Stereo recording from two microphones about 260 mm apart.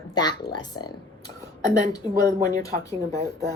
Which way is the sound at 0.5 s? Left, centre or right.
Centre.